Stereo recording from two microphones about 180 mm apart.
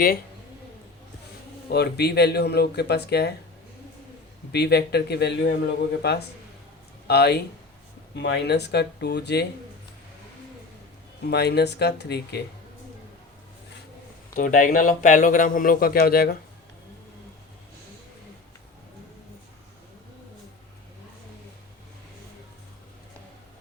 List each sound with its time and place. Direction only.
1.7 s speech: 65° left (ahead or behind)
4.5 s speech: 65° left (ahead or behind)
8.1 s speech: 80° left
11.3 s speech: 65° left (ahead or behind)
14.3 s speech: 50° left (ahead or behind)